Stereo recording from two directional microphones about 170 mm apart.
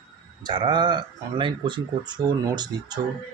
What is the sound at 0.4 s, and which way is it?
Speech, 25° right (ahead or behind).